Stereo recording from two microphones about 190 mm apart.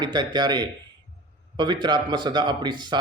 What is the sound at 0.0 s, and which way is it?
Speech, 20° right (ahead or behind).